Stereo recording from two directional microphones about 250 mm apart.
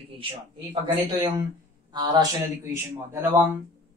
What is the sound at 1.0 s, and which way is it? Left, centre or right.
A woman's voice, centre.